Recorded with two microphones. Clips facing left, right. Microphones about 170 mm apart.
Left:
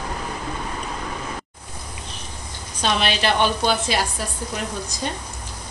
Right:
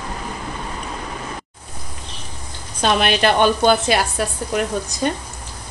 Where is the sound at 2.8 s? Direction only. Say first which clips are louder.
Right 5 dB; 50° right (ahead or behind).